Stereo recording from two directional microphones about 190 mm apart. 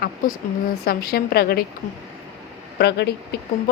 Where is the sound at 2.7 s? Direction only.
60° left (ahead or behind).